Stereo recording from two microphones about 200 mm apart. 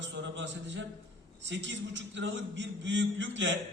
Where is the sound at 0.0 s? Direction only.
65° right (ahead or behind).